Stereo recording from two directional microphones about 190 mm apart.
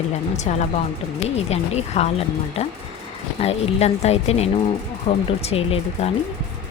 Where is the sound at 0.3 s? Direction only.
40° left (ahead or behind).